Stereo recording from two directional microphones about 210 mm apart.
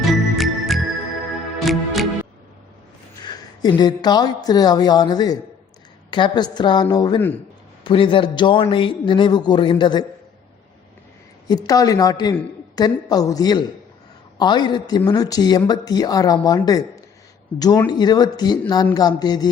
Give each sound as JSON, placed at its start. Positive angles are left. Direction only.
{"t": 0.1, "sound": "music", "side_deg": 0}
{"t": 3.2, "sound": "a man's voice", "side_deg": 20}
{"t": 7.9, "sound": "a man's voice", "side_deg": 25}
{"t": 11.4, "sound": "a man's voice", "side_deg": 20}